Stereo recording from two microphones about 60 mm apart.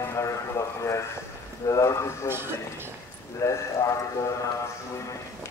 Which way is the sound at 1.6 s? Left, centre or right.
Left.